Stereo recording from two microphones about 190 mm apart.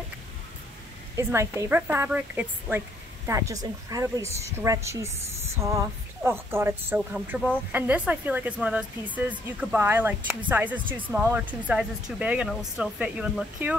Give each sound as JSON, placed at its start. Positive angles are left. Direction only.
{"t": 1.1, "sound": "speech", "side_deg": -15}
{"t": 6.2, "sound": "speech", "side_deg": -10}